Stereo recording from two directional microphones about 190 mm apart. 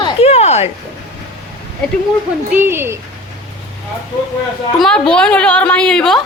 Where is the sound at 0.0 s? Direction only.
35° left (ahead or behind).